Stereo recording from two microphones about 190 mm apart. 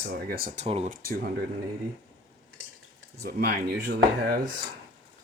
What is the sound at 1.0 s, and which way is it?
Speech, 55° right (ahead or behind).